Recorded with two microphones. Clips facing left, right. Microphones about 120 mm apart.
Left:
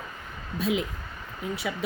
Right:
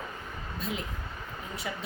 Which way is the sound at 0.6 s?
85° left.